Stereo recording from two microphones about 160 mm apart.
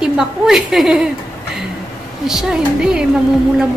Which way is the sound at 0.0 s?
Centre (ahead or behind).